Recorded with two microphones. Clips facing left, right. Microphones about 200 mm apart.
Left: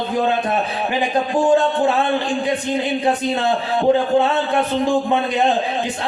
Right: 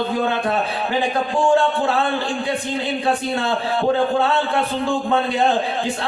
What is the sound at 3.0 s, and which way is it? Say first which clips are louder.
A man's voice: left 1 dB; 20° left (ahead or behind).